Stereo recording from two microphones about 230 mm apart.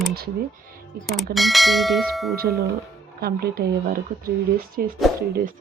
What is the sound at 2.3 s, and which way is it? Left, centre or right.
Speech, right.